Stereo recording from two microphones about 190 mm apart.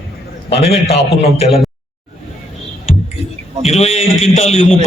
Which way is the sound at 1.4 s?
30° left (ahead or behind).